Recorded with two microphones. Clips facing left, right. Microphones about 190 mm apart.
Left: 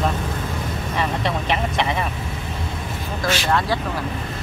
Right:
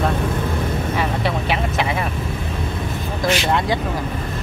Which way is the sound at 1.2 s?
5° right (ahead or behind).